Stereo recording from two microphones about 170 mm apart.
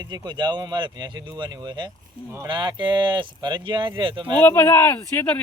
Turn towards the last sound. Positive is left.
turn(degrees=15)  # may be behind; listen again after turning